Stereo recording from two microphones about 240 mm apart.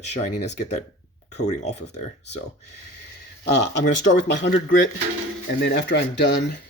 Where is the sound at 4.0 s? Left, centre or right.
Left.